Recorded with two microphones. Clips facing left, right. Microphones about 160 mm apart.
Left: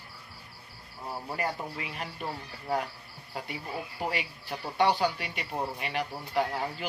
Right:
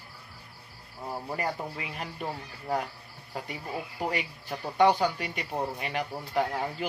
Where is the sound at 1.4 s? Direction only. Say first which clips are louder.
Left 1 dB; 40° right (ahead or behind).